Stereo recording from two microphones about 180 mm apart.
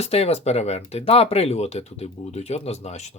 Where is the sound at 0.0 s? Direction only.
35° left (ahead or behind).